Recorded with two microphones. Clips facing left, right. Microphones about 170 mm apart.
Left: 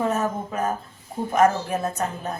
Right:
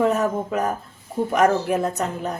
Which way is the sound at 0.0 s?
75° right (ahead or behind).